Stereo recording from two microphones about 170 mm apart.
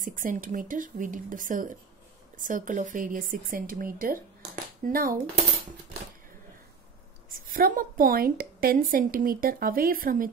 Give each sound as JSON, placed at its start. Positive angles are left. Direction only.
{"t": 0.0, "sound": "speech", "side_deg": -50}
{"t": 7.2, "sound": "a woman's voice", "side_deg": -55}